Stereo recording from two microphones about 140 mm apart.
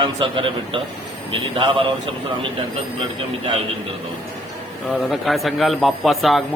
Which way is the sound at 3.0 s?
40° right (ahead or behind).